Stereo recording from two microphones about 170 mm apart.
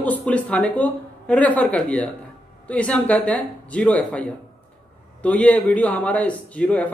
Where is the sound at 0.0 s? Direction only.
10° left (ahead or behind).